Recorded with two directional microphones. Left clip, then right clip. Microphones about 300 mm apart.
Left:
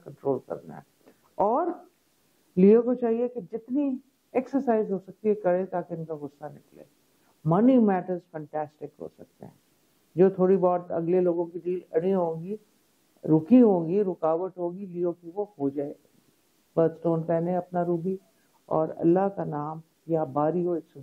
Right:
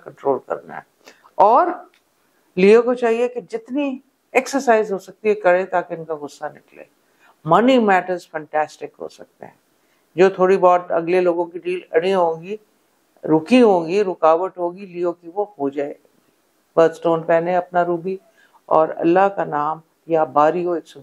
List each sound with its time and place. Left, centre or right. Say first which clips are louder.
0.0 s speech: right 8 dB; centre
15.7 s speech: right 8 dB; centre